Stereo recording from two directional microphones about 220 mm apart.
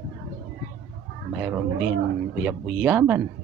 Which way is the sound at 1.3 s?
5° right (ahead or behind).